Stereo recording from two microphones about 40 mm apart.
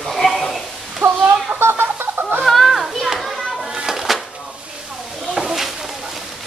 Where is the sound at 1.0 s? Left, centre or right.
Right.